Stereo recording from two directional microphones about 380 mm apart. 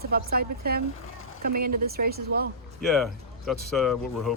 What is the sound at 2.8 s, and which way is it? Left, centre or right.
Speech, centre.